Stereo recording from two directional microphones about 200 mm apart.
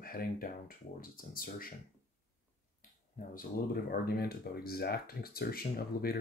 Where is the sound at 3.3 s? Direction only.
45° left (ahead or behind).